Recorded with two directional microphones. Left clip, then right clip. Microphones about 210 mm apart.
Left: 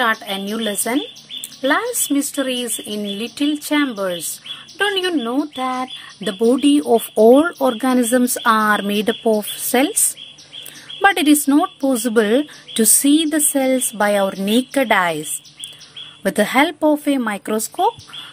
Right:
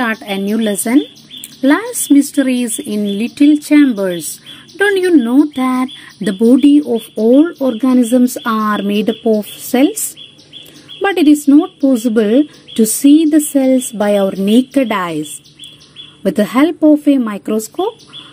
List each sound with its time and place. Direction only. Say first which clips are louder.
0.0 s speech: right 1 dB; 5° left (ahead or behind)
6.5 s speech: right 8 dB; 10° left (ahead or behind)
6.8 s speech: left 2 dB; 30° left (ahead or behind)